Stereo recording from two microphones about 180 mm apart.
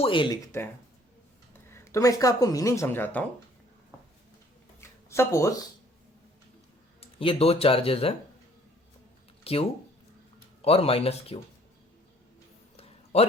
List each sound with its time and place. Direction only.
0.0 s speech: 25° left (ahead or behind); by 3.2 s 10° left (ahead or behind)
4.8 s a sound: 15° left (ahead or behind)
7.0 s speech: 30° left (ahead or behind)
9.4 s speech: 35° left (ahead or behind)
13.1 s speech: 35° left (ahead or behind)